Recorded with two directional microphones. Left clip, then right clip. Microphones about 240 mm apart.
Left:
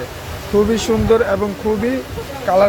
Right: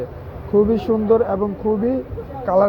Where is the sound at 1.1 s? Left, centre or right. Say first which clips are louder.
Left 2 dB; left.